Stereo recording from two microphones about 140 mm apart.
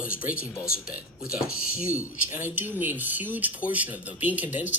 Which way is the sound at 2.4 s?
10° right (ahead or behind).